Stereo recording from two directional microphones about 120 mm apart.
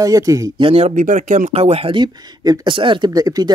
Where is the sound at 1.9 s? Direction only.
35° right (ahead or behind).